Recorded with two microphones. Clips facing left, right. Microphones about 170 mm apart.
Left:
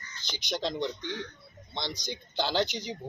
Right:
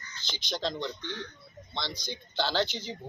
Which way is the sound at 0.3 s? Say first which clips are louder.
Left 1 dB; 20° left (ahead or behind).